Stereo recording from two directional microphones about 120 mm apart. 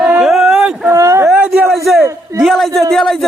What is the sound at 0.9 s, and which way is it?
Speech, 25° right (ahead or behind).